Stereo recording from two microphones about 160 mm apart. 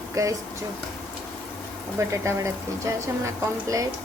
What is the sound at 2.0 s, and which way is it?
A woman's voice, 15° right (ahead or behind).